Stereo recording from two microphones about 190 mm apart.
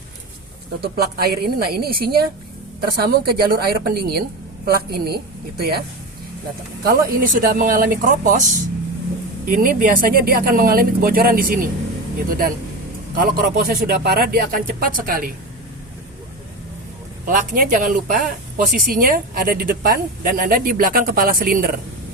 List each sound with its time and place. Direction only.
0.8 s a woman's voice: 55° right (ahead or behind)
6.8 s speech: 50° right (ahead or behind)
13.1 s speech: 50° right (ahead or behind)
17.2 s speech: 45° right (ahead or behind)